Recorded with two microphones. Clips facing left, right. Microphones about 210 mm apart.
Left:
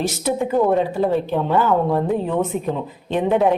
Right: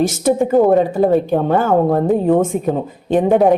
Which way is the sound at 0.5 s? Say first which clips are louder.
Right 5 dB; 45° right (ahead or behind).